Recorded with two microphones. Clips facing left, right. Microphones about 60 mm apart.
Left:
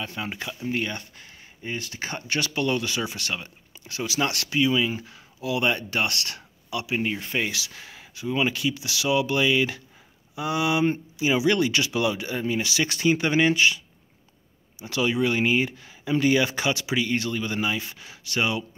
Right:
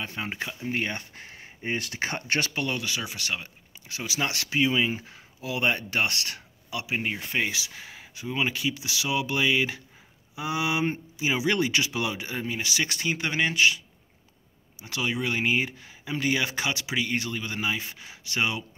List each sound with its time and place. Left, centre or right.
0.0 s speech: right
1.1 s speech: right
2.5 s speech: centre
14.8 s speech: centre